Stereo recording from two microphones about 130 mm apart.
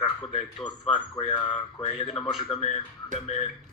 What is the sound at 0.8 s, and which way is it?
Speech, 45° left (ahead or behind).